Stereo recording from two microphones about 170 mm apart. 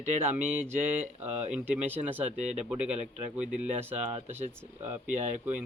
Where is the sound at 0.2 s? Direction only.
10° right (ahead or behind).